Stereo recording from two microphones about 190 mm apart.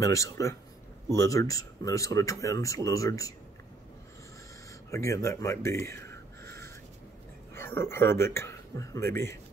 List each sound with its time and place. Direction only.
0.0 s speech: 15° left (ahead or behind)
4.9 s speech: 15° left (ahead or behind)
6.4 s crow: 15° left (ahead or behind)
7.5 s speech: 15° left (ahead or behind)